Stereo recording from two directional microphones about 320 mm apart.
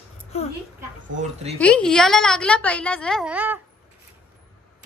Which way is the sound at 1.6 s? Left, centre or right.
Centre.